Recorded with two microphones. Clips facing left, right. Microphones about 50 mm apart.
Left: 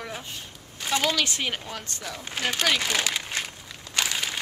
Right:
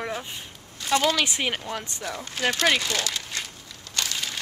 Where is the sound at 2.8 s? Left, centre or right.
Left.